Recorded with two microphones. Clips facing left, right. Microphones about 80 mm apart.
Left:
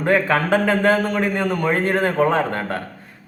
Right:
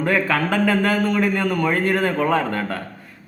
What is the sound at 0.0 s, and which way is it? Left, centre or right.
A man's voice, left.